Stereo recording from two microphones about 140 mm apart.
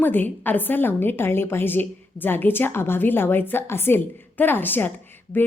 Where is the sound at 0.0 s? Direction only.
15° left (ahead or behind).